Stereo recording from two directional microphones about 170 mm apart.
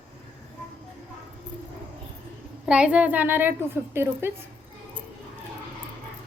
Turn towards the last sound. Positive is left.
turn(degrees=-15)  # may be behind; listen again after turning